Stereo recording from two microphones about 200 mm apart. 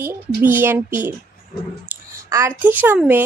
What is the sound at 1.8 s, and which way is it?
Clicking, 10° right (ahead or behind).